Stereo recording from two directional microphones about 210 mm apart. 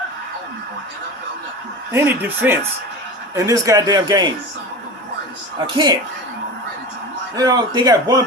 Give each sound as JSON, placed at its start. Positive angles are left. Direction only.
{"t": 1.9, "sound": "speech", "side_deg": -10}
{"t": 5.5, "sound": "a man's voice", "side_deg": -20}
{"t": 7.3, "sound": "a man's voice", "side_deg": -20}